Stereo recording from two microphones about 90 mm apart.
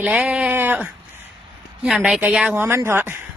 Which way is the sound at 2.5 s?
25° right (ahead or behind).